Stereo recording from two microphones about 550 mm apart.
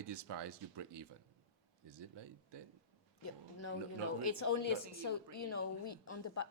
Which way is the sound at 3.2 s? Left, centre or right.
Left.